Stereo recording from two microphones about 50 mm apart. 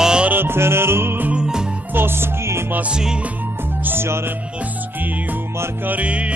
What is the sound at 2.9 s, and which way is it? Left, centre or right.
Music, centre.